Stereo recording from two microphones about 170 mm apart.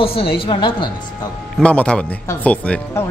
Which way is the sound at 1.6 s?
5° left (ahead or behind).